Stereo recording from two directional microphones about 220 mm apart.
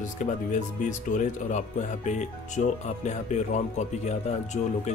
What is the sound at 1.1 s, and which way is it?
Speech, 35° left (ahead or behind).